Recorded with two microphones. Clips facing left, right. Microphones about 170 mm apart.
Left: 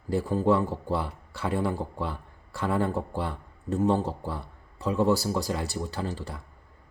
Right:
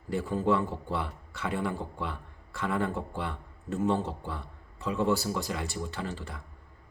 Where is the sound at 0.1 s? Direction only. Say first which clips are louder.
Left 4 dB; 35° left (ahead or behind).